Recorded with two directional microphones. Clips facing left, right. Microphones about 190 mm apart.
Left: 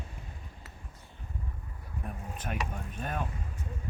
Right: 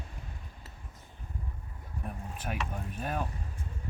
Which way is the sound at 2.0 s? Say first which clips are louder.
Even; 5° right (ahead or behind).